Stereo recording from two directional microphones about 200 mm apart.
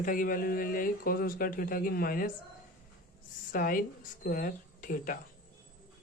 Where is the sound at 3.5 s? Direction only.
45° left (ahead or behind).